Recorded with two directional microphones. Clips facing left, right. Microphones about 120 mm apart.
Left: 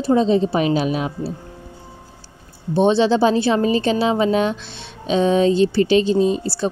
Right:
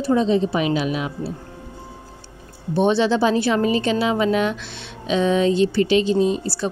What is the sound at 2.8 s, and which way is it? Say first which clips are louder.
Speech: left 3 dB; 30° left (ahead or behind).